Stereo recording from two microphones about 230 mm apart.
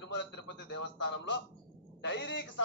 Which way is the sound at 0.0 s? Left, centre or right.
Left.